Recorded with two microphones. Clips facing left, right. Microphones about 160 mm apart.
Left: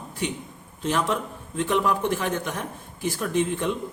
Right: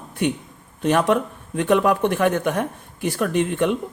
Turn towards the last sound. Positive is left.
turn(degrees=-65)  # may be behind; listen again after turning